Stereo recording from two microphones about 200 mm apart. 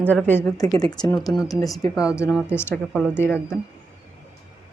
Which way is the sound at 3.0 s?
10° left (ahead or behind).